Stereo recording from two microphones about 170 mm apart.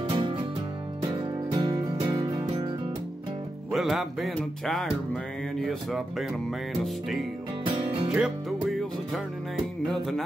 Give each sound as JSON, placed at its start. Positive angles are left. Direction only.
{"t": 0.1, "sound": "music", "side_deg": -30}
{"t": 3.7, "sound": "music", "side_deg": 0}
{"t": 7.6, "sound": "music", "side_deg": -30}
{"t": 8.1, "sound": "music", "side_deg": -5}